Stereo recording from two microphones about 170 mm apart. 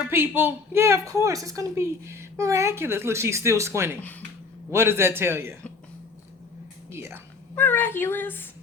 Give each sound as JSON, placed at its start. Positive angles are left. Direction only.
{"t": 0.1, "sound": "a woman's voice", "side_deg": -15}
{"t": 6.9, "sound": "a woman's voice", "side_deg": -15}
{"t": 7.5, "sound": "a woman's voice", "side_deg": 10}